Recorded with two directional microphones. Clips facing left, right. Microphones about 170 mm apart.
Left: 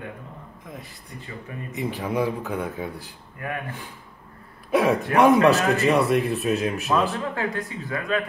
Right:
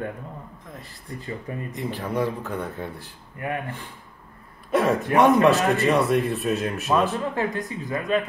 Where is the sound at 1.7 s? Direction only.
5° left (ahead or behind).